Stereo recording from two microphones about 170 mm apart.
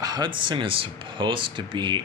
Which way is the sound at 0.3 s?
30° right (ahead or behind).